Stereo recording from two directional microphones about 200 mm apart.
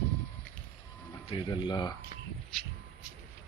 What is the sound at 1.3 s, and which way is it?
Speech, 20° left (ahead or behind).